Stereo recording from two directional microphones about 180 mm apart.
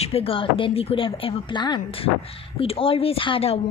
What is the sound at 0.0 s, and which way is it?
A woman's voice, 35° left (ahead or behind).